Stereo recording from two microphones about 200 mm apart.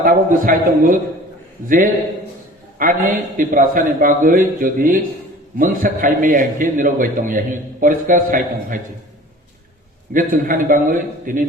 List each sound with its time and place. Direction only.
0.0 s a man's voice: 45° right (ahead or behind)
10.1 s a man's voice: 45° right (ahead or behind)